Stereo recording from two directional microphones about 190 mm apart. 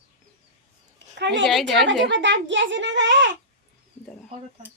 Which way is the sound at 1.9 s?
70° right (ahead or behind).